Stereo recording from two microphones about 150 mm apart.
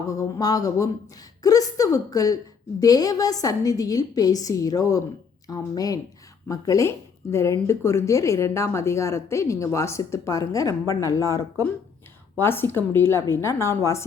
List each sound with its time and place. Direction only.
0.1 s a woman's voice: 25° left (ahead or behind)